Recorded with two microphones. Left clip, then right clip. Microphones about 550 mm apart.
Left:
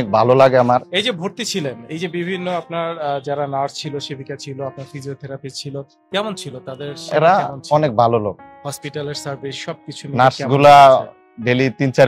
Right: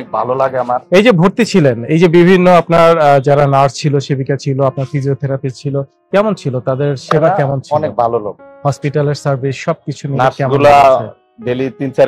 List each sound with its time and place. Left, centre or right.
0.0 s a man's voice: left
0.9 s a man's voice: right; by 6.5 s centre
6.6 s a man's voice: right
7.7 s a man's voice: left
8.6 s a man's voice: right
10.5 s speech: left